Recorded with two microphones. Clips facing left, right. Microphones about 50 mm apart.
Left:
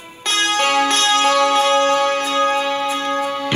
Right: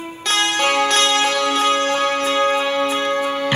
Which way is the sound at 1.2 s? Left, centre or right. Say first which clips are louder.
Left 3 dB; left.